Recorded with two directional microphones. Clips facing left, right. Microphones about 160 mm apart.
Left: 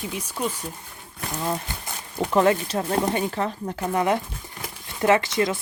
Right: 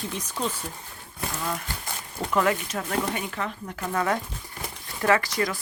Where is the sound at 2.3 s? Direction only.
30° left (ahead or behind).